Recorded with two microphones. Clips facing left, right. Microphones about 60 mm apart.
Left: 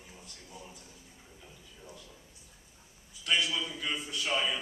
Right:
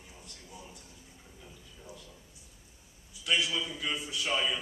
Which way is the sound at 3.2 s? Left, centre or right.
Centre.